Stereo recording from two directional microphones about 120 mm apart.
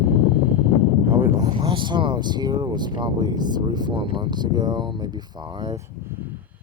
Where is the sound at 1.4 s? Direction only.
40° right (ahead or behind).